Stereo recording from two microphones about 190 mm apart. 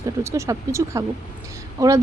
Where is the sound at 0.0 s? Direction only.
15° right (ahead or behind).